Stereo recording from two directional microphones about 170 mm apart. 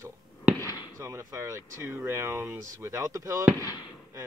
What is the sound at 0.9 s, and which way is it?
Speech, 15° right (ahead or behind).